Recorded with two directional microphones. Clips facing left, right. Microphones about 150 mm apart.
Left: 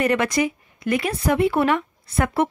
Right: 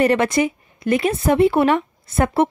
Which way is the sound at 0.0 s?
30° right (ahead or behind).